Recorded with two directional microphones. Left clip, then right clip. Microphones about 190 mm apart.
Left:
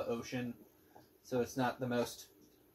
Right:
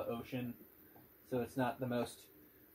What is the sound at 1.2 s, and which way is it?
Speech, 40° left (ahead or behind).